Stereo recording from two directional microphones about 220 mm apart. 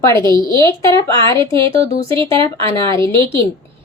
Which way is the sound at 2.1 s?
25° right (ahead or behind).